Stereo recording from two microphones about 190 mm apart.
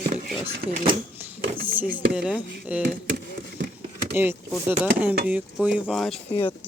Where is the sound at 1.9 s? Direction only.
50° right (ahead or behind).